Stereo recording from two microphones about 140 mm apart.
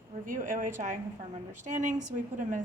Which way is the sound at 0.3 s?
70° right (ahead or behind).